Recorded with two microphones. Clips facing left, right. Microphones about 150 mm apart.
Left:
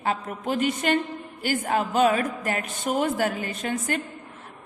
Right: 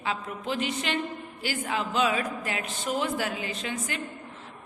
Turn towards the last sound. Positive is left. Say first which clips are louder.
# left 5 dB
turn(degrees=50)  # may be behind; listen again after turning